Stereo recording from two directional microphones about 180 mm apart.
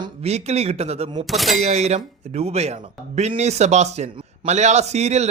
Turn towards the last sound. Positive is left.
turn(degrees=-40)  # may be behind; listen again after turning